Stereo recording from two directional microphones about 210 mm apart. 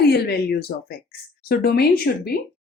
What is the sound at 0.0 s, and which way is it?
Speech, 50° left (ahead or behind).